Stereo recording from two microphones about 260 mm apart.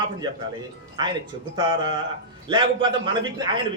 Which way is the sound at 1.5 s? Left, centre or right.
Centre.